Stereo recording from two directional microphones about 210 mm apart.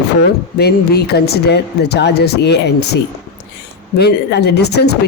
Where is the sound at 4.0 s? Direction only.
50° left (ahead or behind).